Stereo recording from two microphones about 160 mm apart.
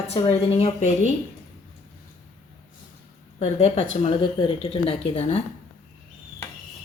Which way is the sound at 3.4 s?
45° left (ahead or behind).